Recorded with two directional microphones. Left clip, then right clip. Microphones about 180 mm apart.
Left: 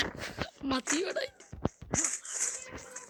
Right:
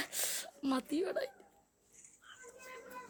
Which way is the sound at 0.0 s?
5° right (ahead or behind).